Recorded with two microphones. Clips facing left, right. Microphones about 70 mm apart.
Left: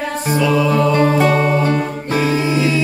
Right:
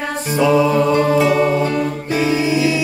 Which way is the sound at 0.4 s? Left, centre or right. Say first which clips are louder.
Right 2 dB; right.